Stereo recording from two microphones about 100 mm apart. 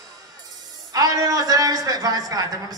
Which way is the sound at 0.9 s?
35° right (ahead or behind).